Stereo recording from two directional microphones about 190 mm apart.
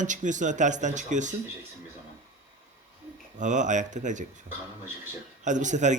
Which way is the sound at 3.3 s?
40° right (ahead or behind).